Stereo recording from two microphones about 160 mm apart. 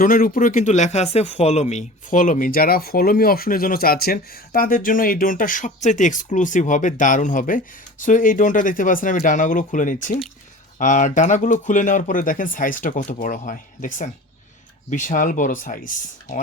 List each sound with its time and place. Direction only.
0.0 s speech: 60° left (ahead or behind)